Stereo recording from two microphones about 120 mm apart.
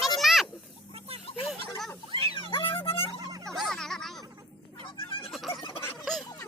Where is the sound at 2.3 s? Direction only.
45° left (ahead or behind).